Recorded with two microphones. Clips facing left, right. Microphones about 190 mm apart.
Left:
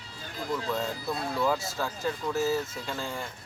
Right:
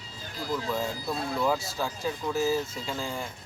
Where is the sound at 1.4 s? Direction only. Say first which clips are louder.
Even; centre (ahead or behind).